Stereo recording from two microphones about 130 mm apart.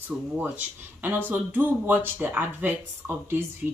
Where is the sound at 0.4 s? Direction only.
15° right (ahead or behind).